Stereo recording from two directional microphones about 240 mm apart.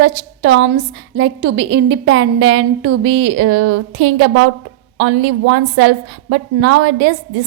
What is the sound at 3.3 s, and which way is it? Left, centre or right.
A woman's voice, right.